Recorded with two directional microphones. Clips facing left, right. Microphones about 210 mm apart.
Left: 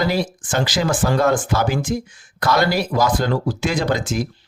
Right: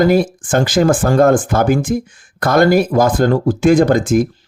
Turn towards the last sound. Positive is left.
turn(degrees=-50)  # may be behind; listen again after turning